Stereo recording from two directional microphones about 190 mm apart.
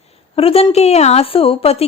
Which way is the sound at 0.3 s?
30° left (ahead or behind).